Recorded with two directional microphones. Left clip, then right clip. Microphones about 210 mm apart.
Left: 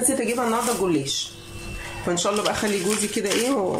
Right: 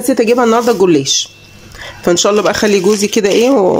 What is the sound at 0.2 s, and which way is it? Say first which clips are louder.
Speech: right 13 dB; 50° right (ahead or behind).